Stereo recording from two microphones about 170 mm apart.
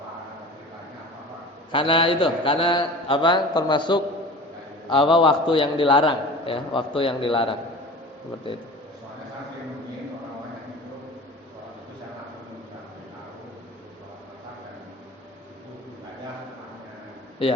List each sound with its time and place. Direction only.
1.7 s a man's voice: 30° left (ahead or behind)